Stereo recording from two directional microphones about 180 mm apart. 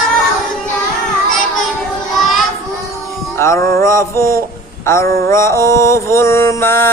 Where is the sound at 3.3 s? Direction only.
15° left (ahead or behind).